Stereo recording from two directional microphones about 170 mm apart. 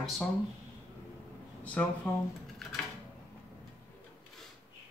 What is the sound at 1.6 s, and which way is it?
Speech, 10° left (ahead or behind).